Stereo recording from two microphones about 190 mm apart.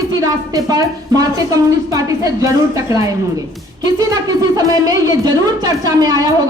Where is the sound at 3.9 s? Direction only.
20° right (ahead or behind).